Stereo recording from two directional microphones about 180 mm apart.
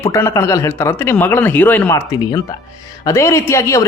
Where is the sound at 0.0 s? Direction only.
15° left (ahead or behind).